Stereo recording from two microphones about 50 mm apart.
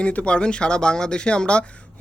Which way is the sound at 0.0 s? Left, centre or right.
Left.